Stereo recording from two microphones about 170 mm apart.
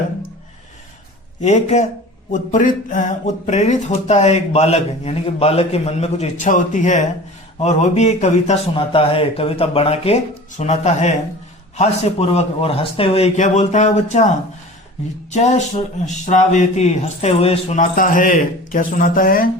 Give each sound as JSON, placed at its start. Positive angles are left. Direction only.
{"t": 1.4, "sound": "speech", "side_deg": 45}
{"t": 15.3, "sound": "speech", "side_deg": 45}